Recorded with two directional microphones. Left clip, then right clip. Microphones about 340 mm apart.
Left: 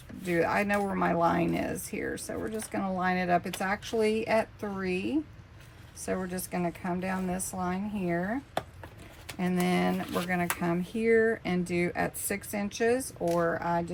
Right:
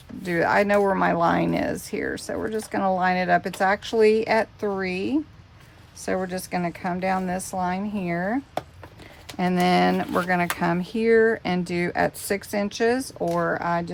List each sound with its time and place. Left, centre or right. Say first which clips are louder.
0.3 s a woman's voice: right 7 dB; right
9.4 s a woman's voice: right 9 dB; right